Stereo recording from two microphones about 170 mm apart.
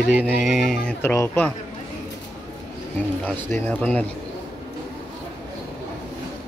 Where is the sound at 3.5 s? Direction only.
10° left (ahead or behind).